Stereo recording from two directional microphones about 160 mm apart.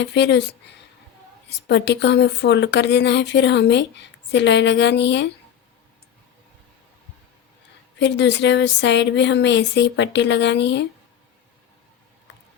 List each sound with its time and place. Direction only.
0.0 s speech: 90° left
7.9 s speech: 90° left